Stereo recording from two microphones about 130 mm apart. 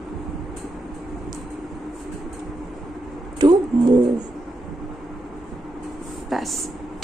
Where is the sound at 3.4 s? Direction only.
30° right (ahead or behind).